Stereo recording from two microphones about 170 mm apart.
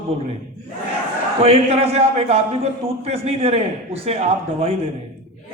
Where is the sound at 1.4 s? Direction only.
35° right (ahead or behind).